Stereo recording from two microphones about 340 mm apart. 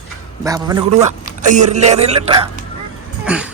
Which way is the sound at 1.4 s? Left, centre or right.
Right.